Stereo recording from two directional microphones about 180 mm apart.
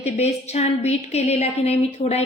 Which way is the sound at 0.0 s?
35° left (ahead or behind).